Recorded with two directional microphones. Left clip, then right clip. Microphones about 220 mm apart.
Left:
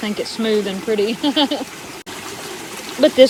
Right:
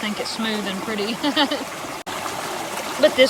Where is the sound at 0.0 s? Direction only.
10° right (ahead or behind).